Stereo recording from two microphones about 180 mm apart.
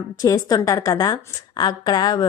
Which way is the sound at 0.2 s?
20° left (ahead or behind).